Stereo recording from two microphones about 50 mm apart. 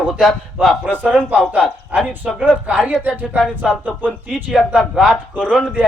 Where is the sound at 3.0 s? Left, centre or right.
Right.